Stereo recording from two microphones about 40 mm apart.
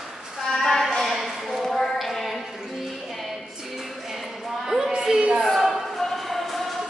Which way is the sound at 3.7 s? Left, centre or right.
Centre.